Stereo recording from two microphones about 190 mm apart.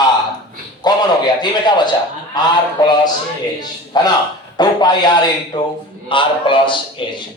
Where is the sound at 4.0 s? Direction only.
20° left (ahead or behind).